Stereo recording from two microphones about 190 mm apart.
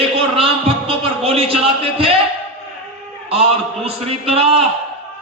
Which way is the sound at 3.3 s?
30° right (ahead or behind).